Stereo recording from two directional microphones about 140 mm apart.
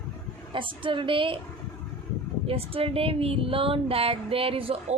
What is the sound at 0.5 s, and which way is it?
Speech, 35° right (ahead or behind).